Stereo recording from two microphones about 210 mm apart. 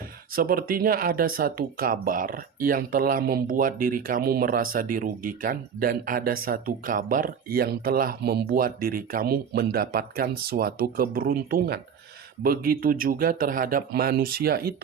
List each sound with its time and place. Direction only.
0.3 s speech: 45° right (ahead or behind)